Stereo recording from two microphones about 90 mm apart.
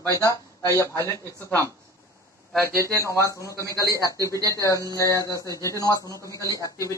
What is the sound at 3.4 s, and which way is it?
Speech, 35° left (ahead or behind).